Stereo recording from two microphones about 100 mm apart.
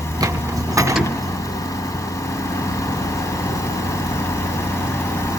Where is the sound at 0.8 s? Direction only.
35° right (ahead or behind).